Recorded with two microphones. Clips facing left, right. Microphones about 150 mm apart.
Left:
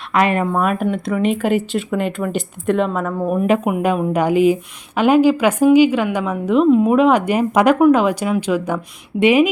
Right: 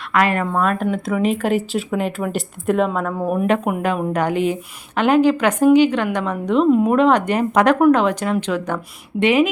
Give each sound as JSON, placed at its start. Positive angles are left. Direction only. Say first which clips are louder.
{"t": 0.1, "sound": "speech", "louder": "left 2 dB", "side_deg": 20}
{"t": 0.5, "sound": "speech", "louder": "left 1 dB", "side_deg": 10}
{"t": 3.4, "sound": "a woman's voice", "louder": "left 3 dB", "side_deg": 5}